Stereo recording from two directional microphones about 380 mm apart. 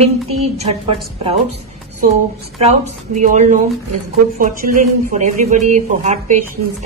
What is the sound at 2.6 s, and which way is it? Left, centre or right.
A woman's voice, centre.